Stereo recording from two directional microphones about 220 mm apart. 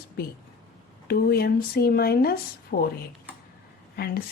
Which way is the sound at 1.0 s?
45° left (ahead or behind).